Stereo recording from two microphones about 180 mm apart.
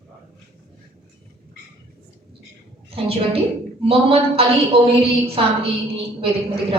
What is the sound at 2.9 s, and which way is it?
A woman's voice, 30° right (ahead or behind).